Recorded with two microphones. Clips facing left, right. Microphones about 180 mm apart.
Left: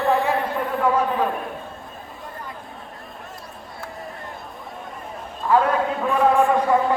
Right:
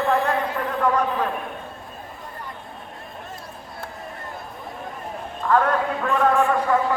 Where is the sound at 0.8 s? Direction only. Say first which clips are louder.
Left 1 dB; 5° left (ahead or behind).